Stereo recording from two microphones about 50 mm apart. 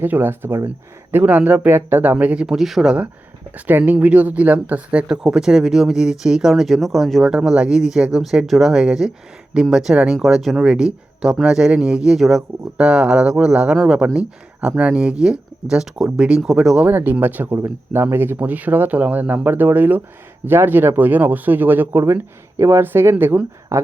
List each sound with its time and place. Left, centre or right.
0.0 s speech: right
1.1 s speech: right
1.6 s speech: right
2.5 s speech: centre
2.8 s speech: right
3.5 s speech: right
5.0 s speech: centre
6.5 s speech: centre
7.4 s speech: centre
16.1 s speech: right
16.4 s speech: centre
16.9 s speech: right
18.3 s speech: right
23.7 s speech: right